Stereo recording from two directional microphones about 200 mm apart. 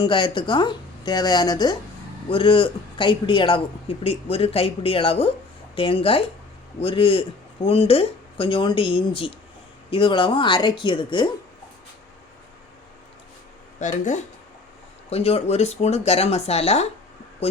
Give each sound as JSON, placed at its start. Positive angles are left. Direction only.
{"t": 0.0, "sound": "speech", "side_deg": 25}
{"t": 13.7, "sound": "speech", "side_deg": 40}